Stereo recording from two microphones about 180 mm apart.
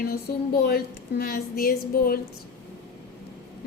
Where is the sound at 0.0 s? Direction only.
55° left (ahead or behind).